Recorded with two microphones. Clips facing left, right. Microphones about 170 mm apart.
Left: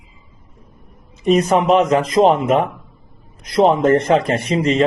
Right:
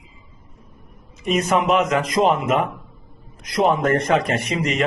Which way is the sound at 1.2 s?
30° left (ahead or behind).